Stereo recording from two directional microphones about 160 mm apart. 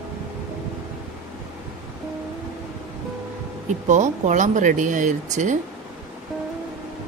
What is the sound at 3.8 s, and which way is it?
Speech, 50° right (ahead or behind).